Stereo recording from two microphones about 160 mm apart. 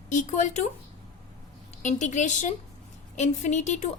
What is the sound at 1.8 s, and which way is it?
A woman's voice, 50° left (ahead or behind).